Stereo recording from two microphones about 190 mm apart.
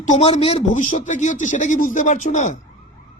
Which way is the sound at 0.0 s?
35° left (ahead or behind).